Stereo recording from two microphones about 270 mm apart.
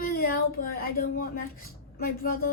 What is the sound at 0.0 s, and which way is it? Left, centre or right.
A woman's voice, left.